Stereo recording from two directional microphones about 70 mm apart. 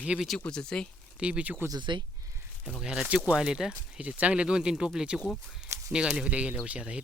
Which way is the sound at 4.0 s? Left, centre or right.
Centre.